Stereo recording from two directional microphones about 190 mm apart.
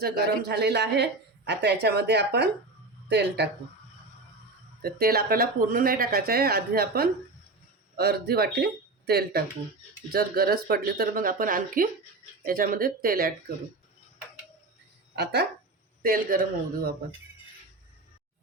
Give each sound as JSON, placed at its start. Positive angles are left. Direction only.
{"t": 0.0, "sound": "a woman's voice", "side_deg": -60}
{"t": 4.8, "sound": "a woman's voice", "side_deg": -50}
{"t": 15.1, "sound": "speech", "side_deg": -60}
{"t": 16.0, "sound": "speech", "side_deg": -50}